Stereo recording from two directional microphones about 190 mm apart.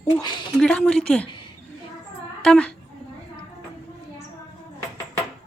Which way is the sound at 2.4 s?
5° left (ahead or behind).